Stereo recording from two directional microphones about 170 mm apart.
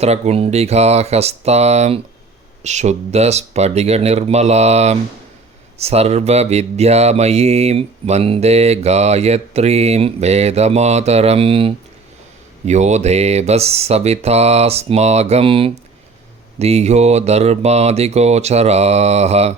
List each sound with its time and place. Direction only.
0.0 s speech: 40° right (ahead or behind)
12.6 s speech: 40° right (ahead or behind)